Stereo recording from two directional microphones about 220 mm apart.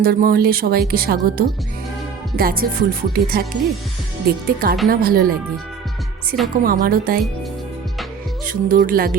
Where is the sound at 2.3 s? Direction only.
40° right (ahead or behind).